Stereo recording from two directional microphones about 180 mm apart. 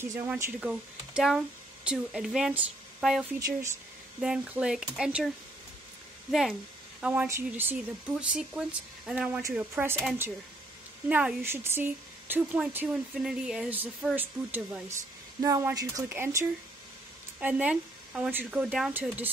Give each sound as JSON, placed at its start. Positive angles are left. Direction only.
{"t": 0.0, "sound": "speech", "side_deg": -15}
{"t": 3.3, "sound": "speech", "side_deg": -20}
{"t": 4.2, "sound": "speech", "side_deg": -5}
{"t": 7.0, "sound": "speech", "side_deg": -10}